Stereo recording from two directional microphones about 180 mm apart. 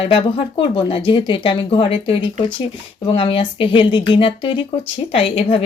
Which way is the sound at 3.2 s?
30° left (ahead or behind).